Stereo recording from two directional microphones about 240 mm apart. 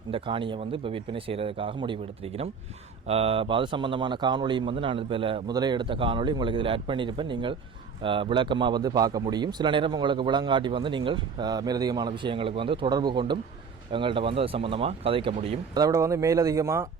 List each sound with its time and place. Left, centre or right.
0.1 s a man's voice: right